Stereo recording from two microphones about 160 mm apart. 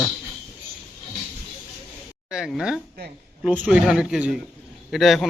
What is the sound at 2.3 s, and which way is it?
A man's voice, 5° right (ahead or behind).